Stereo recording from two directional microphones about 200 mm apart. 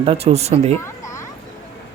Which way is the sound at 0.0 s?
30° right (ahead or behind).